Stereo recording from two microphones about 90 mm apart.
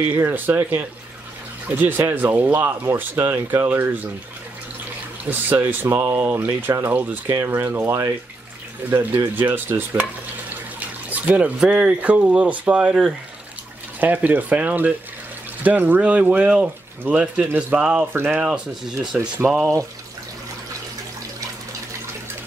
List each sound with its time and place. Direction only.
0.2 s speech: 30° right (ahead or behind)
1.8 s speech: 25° right (ahead or behind)
5.3 s speech: 20° right (ahead or behind)
13.9 s speech: 20° right (ahead or behind)